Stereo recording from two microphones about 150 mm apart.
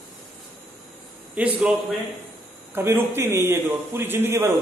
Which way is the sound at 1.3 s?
10° right (ahead or behind).